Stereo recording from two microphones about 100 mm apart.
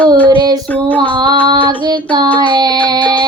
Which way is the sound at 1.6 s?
50° right (ahead or behind).